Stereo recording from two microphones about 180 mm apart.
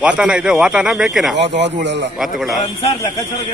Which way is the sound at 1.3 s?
75° right (ahead or behind).